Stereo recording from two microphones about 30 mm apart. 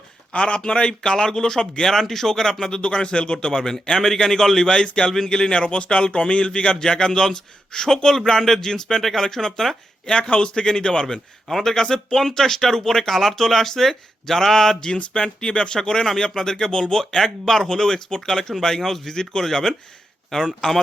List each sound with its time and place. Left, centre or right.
0.3 s speech: left
1.1 s speech: left
2.8 s speech: left; by 4.6 s centre
4.6 s speech: left
5.5 s speech: left; by 9.6 s centre
10.4 s speech: left; by 14.8 s centre
14.9 s speech: left
16.7 s speech: left
17.2 s speech: centre
20.3 s speech: left